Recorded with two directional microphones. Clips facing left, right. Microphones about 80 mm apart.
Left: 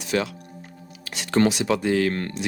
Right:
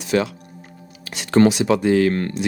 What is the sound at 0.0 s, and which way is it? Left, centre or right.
Music, centre.